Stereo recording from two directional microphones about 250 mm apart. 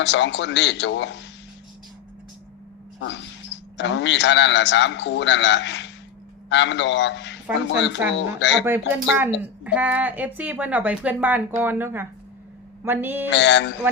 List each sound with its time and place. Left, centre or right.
0.0 s a man's voice: left
3.8 s a man's voice: left
9.0 s a woman's voice: centre
13.3 s a man's voice: left